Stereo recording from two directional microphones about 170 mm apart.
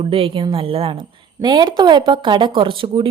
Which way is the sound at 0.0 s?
35° right (ahead or behind).